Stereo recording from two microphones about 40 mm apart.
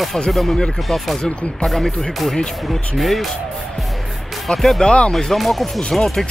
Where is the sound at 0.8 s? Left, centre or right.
Centre.